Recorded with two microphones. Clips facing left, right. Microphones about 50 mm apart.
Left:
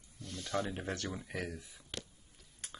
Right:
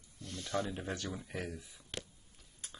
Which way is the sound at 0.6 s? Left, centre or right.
Left.